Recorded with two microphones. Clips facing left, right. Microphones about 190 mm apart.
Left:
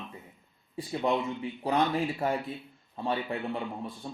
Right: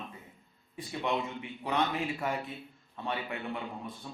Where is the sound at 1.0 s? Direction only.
35° left (ahead or behind).